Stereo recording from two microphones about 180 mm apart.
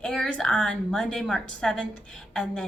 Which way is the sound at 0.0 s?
5° left (ahead or behind).